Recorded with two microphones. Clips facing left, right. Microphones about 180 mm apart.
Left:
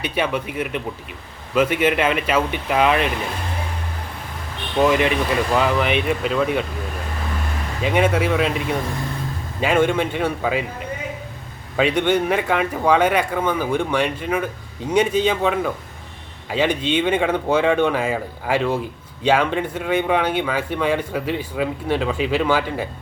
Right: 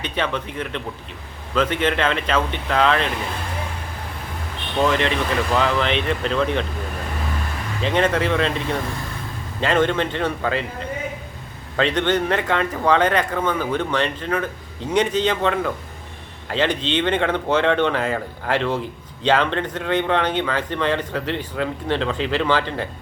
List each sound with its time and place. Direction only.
0.0 s speech: 10° left (ahead or behind)
4.8 s speech: 10° left (ahead or behind)
7.8 s speech: 10° left (ahead or behind)
11.8 s speech: 10° left (ahead or behind)